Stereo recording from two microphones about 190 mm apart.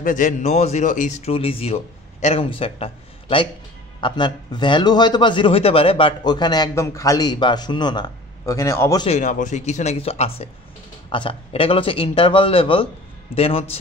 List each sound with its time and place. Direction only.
0.0 s a man's voice: 40° left (ahead or behind); by 9.0 s 15° left (ahead or behind)
9.0 s a man's voice: 40° left (ahead or behind)